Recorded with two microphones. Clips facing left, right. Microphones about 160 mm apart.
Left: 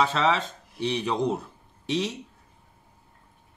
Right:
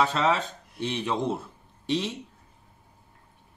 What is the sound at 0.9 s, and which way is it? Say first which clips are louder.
Speech: left 1 dB; 15° left (ahead or behind).